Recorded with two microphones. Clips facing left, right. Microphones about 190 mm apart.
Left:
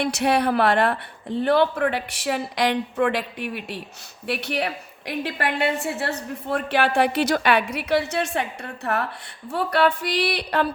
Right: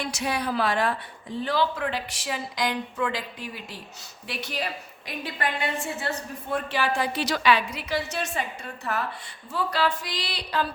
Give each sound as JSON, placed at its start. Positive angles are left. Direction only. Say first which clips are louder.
{"t": 0.0, "sound": "speech", "louder": "left 8 dB", "side_deg": 65}